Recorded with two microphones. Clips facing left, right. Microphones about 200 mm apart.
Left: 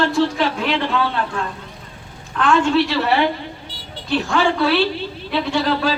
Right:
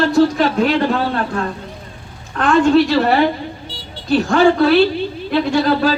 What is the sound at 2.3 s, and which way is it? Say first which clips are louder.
A woman's voice: right 4 dB; 40° right (ahead or behind).